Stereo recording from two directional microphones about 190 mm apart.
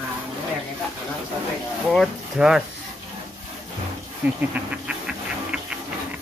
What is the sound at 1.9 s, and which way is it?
Speech, centre (ahead or behind).